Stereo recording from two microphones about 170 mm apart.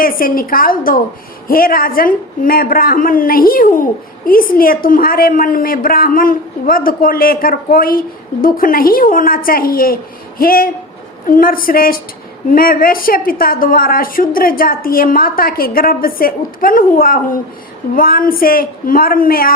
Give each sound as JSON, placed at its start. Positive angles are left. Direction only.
{"t": 0.0, "sound": "a woman's voice", "side_deg": 55}